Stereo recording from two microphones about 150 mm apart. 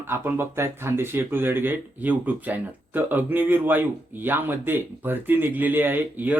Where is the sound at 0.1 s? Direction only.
15° right (ahead or behind).